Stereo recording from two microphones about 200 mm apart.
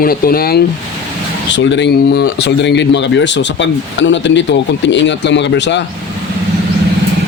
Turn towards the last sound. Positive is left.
turn(degrees=60)  # may be behind; listen again after turning